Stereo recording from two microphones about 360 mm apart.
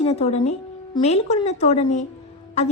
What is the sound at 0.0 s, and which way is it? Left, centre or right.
A woman's voice, centre.